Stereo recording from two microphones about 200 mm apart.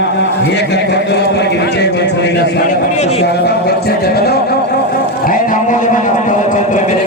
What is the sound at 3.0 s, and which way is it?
Speech, 30° left (ahead or behind).